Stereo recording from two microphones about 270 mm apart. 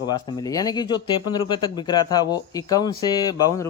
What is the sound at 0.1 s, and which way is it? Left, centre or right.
Speech, centre.